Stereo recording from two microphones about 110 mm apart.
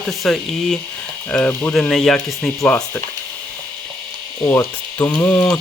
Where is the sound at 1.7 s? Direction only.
5° left (ahead or behind).